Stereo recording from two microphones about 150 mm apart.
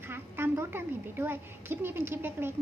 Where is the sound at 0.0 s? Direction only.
15° right (ahead or behind).